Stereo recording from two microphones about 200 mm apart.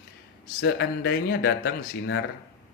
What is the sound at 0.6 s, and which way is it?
Speech, 55° left (ahead or behind).